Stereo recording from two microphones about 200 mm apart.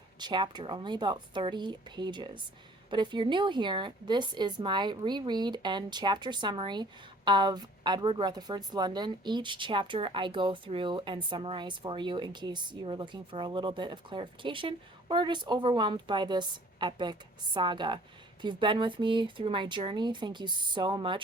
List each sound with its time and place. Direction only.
0.2 s a woman's voice: 25° right (ahead or behind)